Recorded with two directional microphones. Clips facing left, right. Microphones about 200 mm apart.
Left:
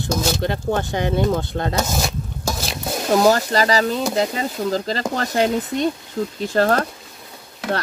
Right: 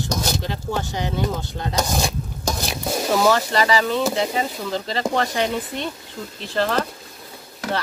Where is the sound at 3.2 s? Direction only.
40° left (ahead or behind).